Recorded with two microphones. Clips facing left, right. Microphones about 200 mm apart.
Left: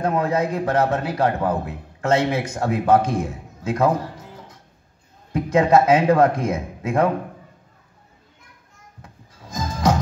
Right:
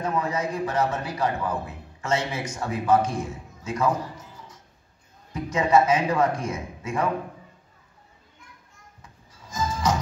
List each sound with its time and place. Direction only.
0.0 s a man's voice: 60° left (ahead or behind)
9.0 s music: 60° left (ahead or behind)